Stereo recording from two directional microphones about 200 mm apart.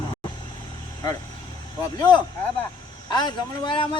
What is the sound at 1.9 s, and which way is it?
A man's voice, 20° left (ahead or behind).